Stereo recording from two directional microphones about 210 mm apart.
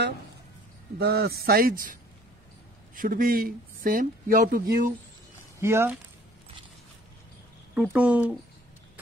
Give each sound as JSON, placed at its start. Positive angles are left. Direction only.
{"t": 0.9, "sound": "speech", "side_deg": -50}
{"t": 3.0, "sound": "speech", "side_deg": -45}
{"t": 5.6, "sound": "speech", "side_deg": -10}
{"t": 7.7, "sound": "speech", "side_deg": -5}